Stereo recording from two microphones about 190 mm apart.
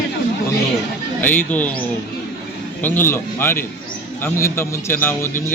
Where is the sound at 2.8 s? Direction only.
10° left (ahead or behind).